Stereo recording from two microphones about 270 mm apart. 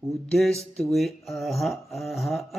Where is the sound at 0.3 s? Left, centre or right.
Centre.